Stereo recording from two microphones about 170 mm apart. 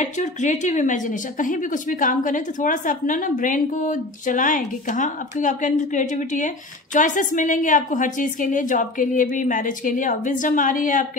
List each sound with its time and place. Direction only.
0.0 s a woman's voice: 45° left (ahead or behind)